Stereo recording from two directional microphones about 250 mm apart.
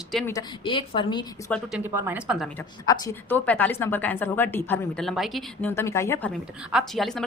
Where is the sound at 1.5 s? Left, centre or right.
Centre.